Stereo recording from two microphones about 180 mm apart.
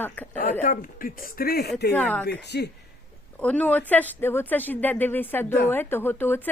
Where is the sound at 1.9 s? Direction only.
10° left (ahead or behind).